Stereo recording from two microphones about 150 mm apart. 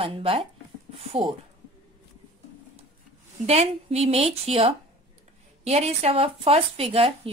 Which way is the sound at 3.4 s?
45° right (ahead or behind).